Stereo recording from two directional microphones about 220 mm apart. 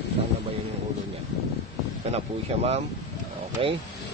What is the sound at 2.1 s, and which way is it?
Speech, 30° right (ahead or behind).